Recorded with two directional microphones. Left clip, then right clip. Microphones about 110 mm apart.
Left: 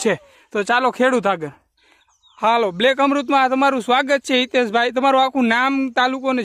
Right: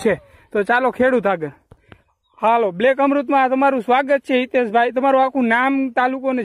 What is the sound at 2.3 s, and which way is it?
Speech, 40° left (ahead or behind).